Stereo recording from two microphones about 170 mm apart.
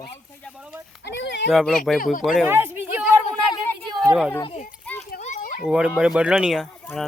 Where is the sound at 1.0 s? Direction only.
90° left.